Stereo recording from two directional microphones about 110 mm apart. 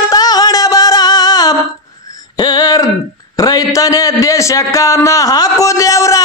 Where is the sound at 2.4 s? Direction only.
40° left (ahead or behind).